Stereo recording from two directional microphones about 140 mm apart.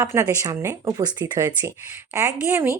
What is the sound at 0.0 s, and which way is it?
Speech, 20° right (ahead or behind).